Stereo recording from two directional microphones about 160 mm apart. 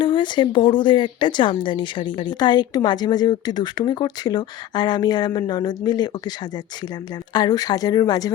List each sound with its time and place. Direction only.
0.0 s speech: 30° left (ahead or behind)
7.3 s speech: 25° left (ahead or behind)